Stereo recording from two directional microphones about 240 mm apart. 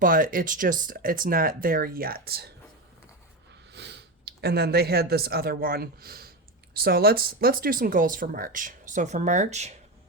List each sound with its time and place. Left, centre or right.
0.0 s speech: right
3.7 s speech: right